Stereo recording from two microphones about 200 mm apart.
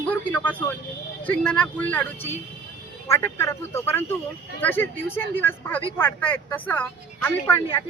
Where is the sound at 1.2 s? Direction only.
5° left (ahead or behind).